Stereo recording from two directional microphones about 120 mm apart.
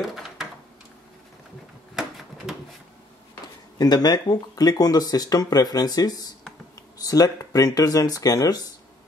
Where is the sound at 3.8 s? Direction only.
35° left (ahead or behind).